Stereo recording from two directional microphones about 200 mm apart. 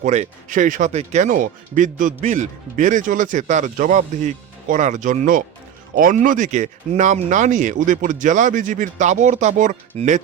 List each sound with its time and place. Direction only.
0.0 s speech: 35° right (ahead or behind)